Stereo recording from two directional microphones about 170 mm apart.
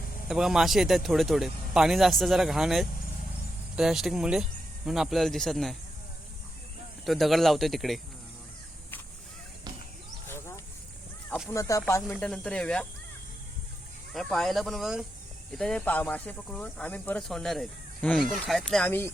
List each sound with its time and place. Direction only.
0.3 s speech: 5° right (ahead or behind)
7.0 s speech: centre (ahead or behind)
10.2 s a sound: 15° left (ahead or behind)
11.4 s speech: 15° left (ahead or behind)
14.1 s speech: centre (ahead or behind)
18.9 s speech: 15° left (ahead or behind)